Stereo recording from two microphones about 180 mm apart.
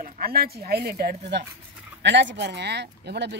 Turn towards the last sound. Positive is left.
turn(degrees=-70)  # may be behind; listen again after turning